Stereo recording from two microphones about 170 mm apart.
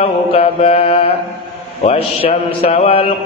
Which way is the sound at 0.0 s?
35° left (ahead or behind).